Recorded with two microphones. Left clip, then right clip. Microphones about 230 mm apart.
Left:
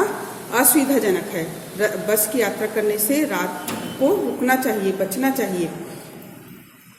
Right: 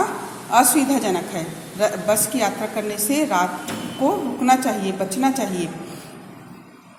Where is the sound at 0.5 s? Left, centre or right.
Right.